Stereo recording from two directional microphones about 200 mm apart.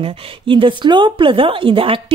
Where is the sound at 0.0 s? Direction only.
25° right (ahead or behind).